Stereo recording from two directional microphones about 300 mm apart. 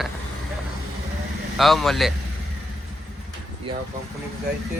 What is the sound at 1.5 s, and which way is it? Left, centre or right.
Speech, centre.